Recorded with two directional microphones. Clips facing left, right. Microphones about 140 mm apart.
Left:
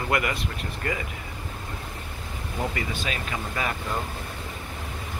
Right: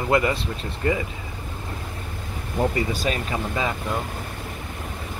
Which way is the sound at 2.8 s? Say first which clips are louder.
Right 6 dB; 40° right (ahead or behind).